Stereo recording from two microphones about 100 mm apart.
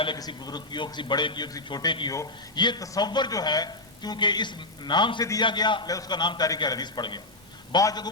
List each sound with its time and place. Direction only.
0.2 s a woman's voice: 45° left (ahead or behind)